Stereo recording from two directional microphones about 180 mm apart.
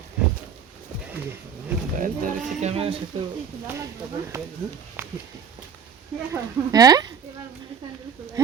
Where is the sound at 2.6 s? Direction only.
35° right (ahead or behind).